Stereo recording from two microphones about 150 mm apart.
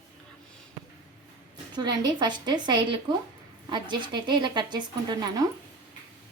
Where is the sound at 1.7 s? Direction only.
30° right (ahead or behind).